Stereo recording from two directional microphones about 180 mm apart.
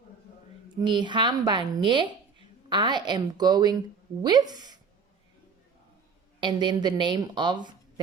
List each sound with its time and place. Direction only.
0.8 s speech: 25° right (ahead or behind)
6.4 s speech: 25° right (ahead or behind)